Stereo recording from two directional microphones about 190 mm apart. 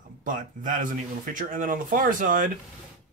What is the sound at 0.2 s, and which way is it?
Speech, 45° right (ahead or behind).